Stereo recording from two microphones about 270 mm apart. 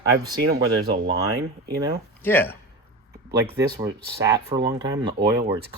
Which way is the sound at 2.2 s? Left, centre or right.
Centre.